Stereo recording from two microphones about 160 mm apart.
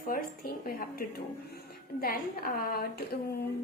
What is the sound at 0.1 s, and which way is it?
A woman's voice, 60° left (ahead or behind).